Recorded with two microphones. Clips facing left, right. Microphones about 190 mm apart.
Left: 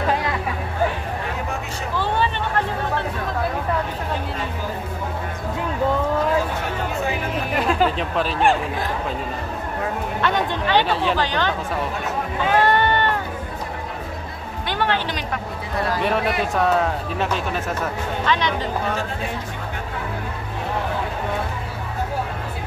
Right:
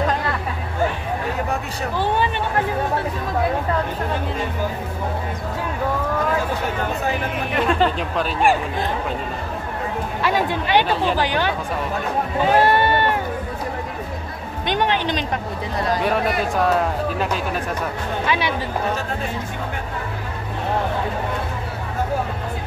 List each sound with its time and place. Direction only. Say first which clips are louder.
7.6 s a sound: right 1 dB; centre (ahead or behind)
10.2 s speech: right 1 dB; 10° right (ahead or behind)
10.9 s speech: right 1 dB; centre (ahead or behind)
11.1 s speech: right 1 dB; 10° right (ahead or behind)
12.4 s sheep: right 1 dB; 10° right (ahead or behind)
14.7 s speech: right 3 dB; 20° right (ahead or behind)
16.0 s speech: even; centre (ahead or behind)